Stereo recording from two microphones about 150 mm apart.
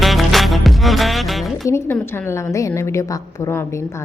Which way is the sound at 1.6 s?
20° left (ahead or behind).